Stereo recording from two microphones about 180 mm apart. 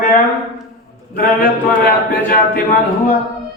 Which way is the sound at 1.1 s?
55° left (ahead or behind).